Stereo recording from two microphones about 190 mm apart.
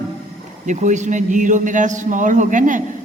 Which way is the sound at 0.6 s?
40° right (ahead or behind).